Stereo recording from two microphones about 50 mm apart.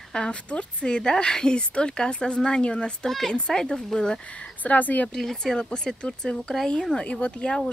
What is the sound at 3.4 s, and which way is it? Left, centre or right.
A woman's voice, centre.